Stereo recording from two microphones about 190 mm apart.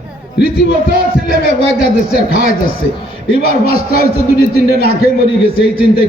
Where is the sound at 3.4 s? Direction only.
50° left (ahead or behind).